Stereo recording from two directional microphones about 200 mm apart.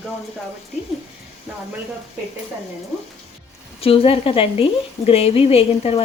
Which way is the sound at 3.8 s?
30° left (ahead or behind).